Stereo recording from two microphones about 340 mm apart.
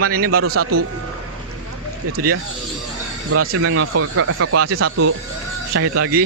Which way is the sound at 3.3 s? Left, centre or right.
Right.